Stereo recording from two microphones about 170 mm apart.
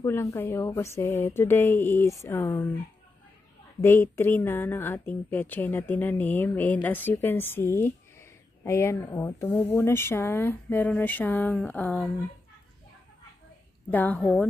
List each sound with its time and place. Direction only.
0.0 s a woman's voice: 20° left (ahead or behind)
3.8 s a woman's voice: 15° left (ahead or behind)
13.8 s a woman's voice: 10° left (ahead or behind)